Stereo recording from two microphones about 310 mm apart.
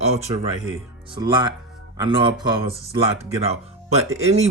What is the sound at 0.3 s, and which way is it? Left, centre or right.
Speech, centre.